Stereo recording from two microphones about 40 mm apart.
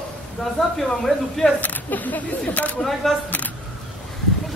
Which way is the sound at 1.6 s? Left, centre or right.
Left.